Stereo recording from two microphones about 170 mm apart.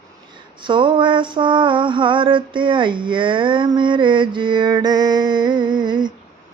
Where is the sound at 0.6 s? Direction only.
30° right (ahead or behind).